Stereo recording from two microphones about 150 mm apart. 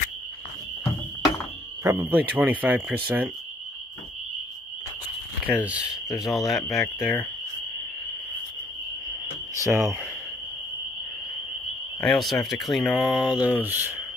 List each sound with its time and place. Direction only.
1.8 s speech: 15° right (ahead or behind)
5.5 s speech: 10° right (ahead or behind)
9.7 s speech: 20° right (ahead or behind)
12.0 s speech: centre (ahead or behind)